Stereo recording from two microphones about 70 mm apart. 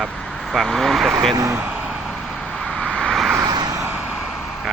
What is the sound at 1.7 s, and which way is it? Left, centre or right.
Vehicle, centre.